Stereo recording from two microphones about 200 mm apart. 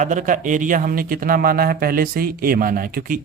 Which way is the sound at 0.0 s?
40° right (ahead or behind).